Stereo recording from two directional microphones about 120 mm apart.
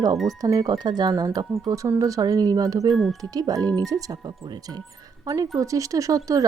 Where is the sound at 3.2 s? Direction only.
30° right (ahead or behind).